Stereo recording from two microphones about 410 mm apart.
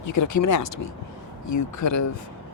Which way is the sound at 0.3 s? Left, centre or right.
Left.